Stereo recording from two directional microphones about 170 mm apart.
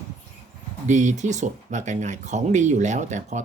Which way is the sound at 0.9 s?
45° right (ahead or behind).